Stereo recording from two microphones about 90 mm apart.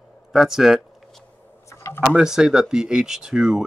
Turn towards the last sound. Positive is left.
turn(degrees=-5)  # may be behind; listen again after turning